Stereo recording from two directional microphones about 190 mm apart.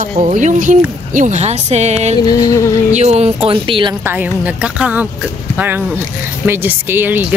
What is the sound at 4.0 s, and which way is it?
Speech, 10° right (ahead or behind).